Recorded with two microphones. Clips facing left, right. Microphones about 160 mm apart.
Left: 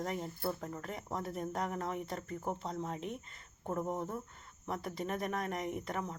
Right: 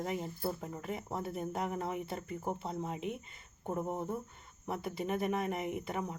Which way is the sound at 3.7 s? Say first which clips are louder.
Right 1 dB; 10° right (ahead or behind).